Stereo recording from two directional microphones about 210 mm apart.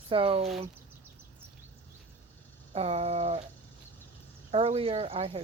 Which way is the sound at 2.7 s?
30° right (ahead or behind).